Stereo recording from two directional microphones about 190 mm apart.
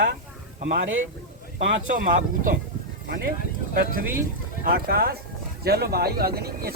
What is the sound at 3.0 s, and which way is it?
Speech, 55° right (ahead or behind).